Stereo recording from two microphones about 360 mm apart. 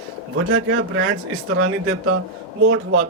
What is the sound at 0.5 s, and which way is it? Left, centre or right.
Speech, right.